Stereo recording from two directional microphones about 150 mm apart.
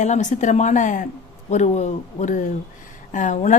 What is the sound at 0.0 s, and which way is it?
A woman's voice, 55° left (ahead or behind).